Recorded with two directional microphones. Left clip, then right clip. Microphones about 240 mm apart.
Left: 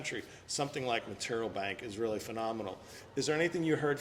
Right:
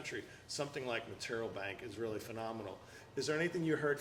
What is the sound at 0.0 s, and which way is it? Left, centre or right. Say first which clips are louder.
A man's voice: left 5 dB; left.